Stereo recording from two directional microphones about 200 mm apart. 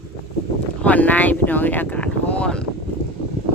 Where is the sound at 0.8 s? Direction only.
5° left (ahead or behind).